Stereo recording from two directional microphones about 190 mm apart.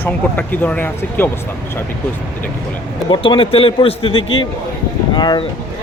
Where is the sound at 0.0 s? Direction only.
10° left (ahead or behind).